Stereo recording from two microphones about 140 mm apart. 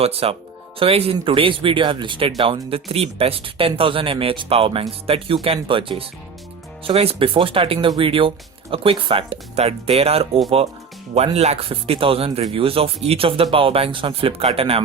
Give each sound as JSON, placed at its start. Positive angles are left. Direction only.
{"t": 0.0, "sound": "speech", "side_deg": -45}